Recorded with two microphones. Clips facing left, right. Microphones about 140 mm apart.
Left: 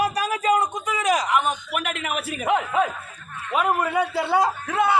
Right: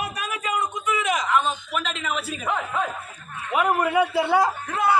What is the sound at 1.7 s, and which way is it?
A man's voice, 60° left (ahead or behind).